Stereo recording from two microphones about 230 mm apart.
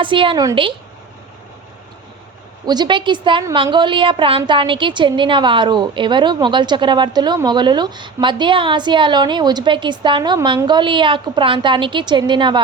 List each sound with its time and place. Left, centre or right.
0.0 s a woman's voice: right
2.6 s a woman's voice: centre